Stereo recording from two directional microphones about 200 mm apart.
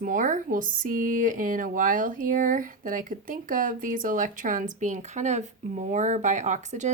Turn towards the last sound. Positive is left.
turn(degrees=-35)  # may be behind; listen again after turning